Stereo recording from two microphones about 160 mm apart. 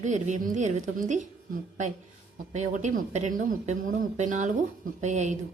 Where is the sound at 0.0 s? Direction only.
50° right (ahead or behind).